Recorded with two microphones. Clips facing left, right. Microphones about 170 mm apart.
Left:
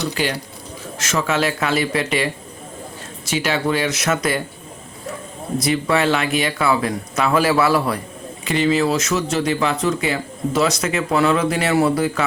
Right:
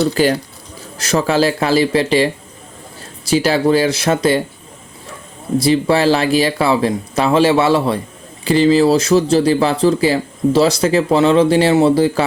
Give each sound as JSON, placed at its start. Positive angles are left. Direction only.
{"t": 0.1, "sound": "speech", "side_deg": -40}
{"t": 5.5, "sound": "speech", "side_deg": -30}